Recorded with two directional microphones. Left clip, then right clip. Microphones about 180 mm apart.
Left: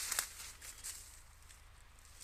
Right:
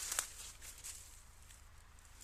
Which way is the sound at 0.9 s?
20° left (ahead or behind).